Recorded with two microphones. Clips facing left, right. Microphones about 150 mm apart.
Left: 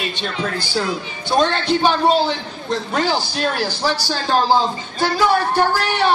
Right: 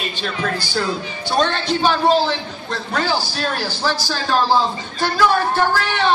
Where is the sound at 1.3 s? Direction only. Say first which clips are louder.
Left 2 dB; 15° left (ahead or behind).